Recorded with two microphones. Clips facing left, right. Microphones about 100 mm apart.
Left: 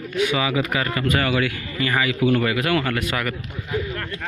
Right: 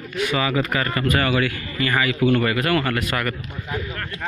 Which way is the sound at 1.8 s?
15° left (ahead or behind).